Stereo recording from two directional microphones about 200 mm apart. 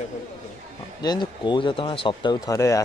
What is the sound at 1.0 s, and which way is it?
Speech, 20° left (ahead or behind).